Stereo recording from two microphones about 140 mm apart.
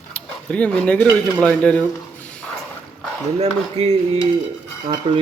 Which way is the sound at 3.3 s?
45° right (ahead or behind).